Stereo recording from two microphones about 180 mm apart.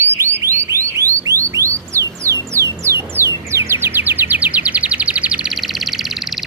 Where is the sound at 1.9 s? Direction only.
15° right (ahead or behind).